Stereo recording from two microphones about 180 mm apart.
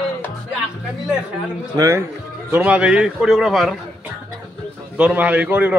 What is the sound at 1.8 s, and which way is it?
A man's voice, 15° right (ahead or behind).